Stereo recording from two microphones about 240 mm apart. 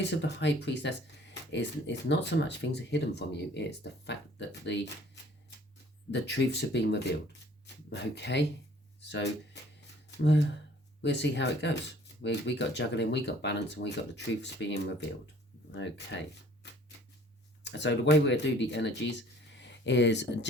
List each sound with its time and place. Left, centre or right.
0.0 s speech: left
6.1 s speech: left
11.0 s speech: left
17.6 s speech: left